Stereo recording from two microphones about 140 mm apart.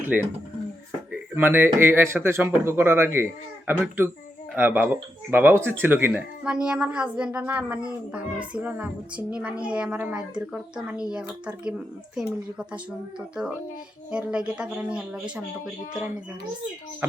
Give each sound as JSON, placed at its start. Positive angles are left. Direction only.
{"t": 0.1, "sound": "speech", "side_deg": -10}
{"t": 1.4, "sound": "speech", "side_deg": -15}
{"t": 17.0, "sound": "speech", "side_deg": -15}